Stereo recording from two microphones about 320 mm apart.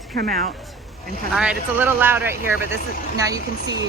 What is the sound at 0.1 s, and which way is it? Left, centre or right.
Speech, right.